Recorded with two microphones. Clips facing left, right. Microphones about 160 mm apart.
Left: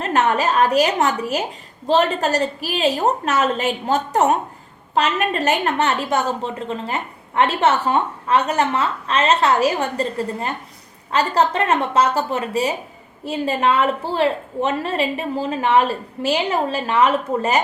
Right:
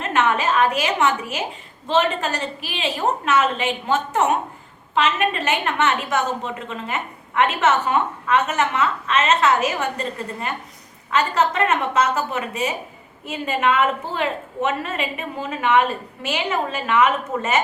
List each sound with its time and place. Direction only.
0.0 s a woman's voice: 40° left (ahead or behind)